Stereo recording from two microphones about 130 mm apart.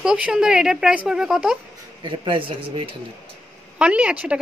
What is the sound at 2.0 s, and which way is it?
Speech, 40° right (ahead or behind).